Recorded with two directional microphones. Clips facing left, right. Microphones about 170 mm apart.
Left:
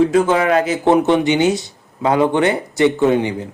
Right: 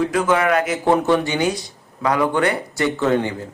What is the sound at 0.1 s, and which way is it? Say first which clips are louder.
Speech: left 3 dB; 30° left (ahead or behind).